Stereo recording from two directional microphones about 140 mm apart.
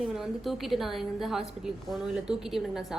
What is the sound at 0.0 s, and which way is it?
A woman's voice, centre (ahead or behind).